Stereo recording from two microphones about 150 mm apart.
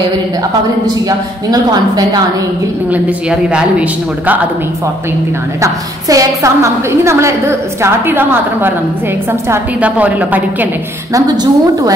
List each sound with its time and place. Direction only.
0.8 s a woman's voice: 25° right (ahead or behind)
2.9 s a woman's voice: 5° right (ahead or behind)
5.6 s a woman's voice: 20° right (ahead or behind)
11.1 s a woman's voice: 25° right (ahead or behind)